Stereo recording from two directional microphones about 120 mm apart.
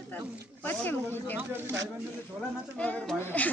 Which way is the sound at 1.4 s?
20° right (ahead or behind).